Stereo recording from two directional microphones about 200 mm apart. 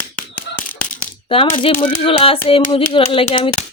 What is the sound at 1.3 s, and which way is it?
Speech, 25° left (ahead or behind).